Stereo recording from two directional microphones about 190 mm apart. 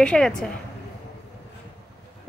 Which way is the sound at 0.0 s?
5° left (ahead or behind).